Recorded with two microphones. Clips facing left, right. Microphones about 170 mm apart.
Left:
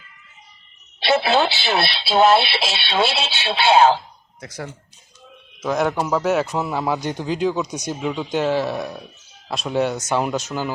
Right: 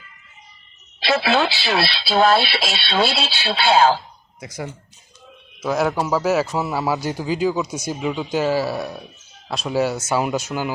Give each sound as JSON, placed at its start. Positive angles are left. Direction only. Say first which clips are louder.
{"t": 0.9, "sound": "a woman's voice", "louder": "left 1 dB", "side_deg": 30}
{"t": 4.4, "sound": "a man's voice", "louder": "right 2 dB", "side_deg": -10}